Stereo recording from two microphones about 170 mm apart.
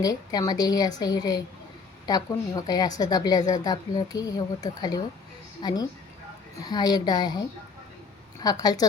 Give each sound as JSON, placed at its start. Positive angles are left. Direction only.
{"t": 0.0, "sound": "a woman's voice", "side_deg": 20}